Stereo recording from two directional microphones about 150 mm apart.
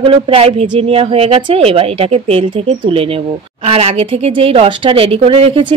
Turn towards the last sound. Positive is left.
turn(degrees=-40)  # may be behind; listen again after turning